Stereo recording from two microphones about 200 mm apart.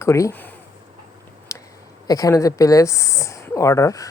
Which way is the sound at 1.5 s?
15° left (ahead or behind).